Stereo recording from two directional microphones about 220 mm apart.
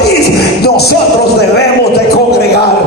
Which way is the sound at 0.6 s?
45° left (ahead or behind).